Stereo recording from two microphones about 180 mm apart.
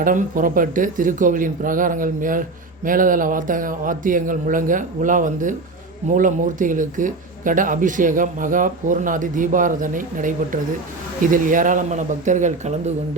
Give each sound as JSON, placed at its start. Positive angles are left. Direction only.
{"t": 0.0, "sound": "speech", "side_deg": -50}